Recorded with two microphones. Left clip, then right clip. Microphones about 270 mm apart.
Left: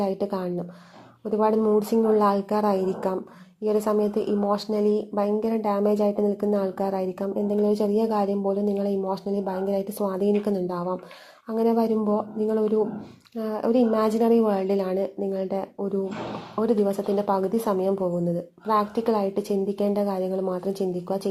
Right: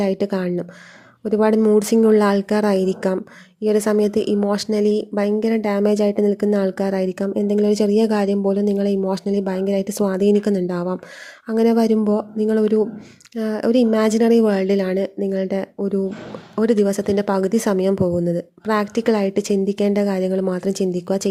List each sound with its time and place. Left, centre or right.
0.0 s speech: right